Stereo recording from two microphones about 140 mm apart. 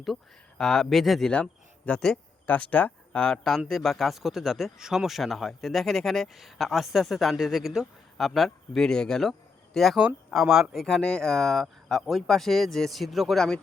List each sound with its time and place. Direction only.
0.6 s speech: 5° left (ahead or behind)